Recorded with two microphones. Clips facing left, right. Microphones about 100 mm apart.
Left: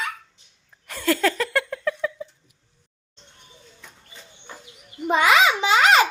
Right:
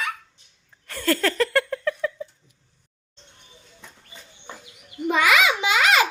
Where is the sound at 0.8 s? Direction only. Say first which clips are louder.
Left 1 dB; 15° left (ahead or behind).